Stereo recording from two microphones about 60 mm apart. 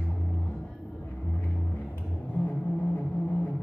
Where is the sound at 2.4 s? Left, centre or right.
Left.